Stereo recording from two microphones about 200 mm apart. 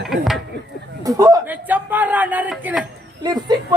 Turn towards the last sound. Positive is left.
turn(degrees=-20)  # may be behind; listen again after turning